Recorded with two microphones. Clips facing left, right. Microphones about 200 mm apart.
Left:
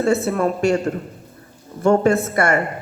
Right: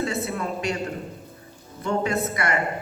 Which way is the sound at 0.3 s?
50° left (ahead or behind).